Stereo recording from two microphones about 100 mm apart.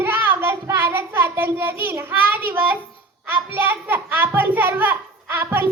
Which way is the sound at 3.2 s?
20° right (ahead or behind).